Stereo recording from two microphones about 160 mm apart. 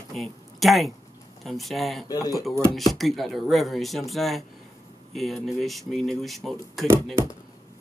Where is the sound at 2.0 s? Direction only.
25° left (ahead or behind).